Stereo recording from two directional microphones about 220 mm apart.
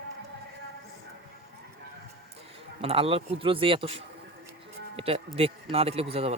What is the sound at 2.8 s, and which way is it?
Speech, 25° right (ahead or behind).